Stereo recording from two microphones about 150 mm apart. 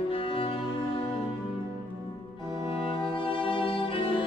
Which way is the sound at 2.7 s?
35° left (ahead or behind).